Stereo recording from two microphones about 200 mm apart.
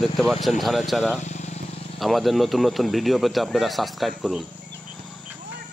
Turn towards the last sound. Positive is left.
turn(degrees=0)  # may be behind; listen again after turning